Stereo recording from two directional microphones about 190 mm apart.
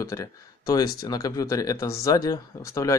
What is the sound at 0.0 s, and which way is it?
Speech, 15° left (ahead or behind).